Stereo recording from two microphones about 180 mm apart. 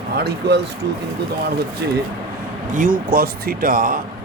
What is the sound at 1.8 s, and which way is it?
Speech, 65° right (ahead or behind).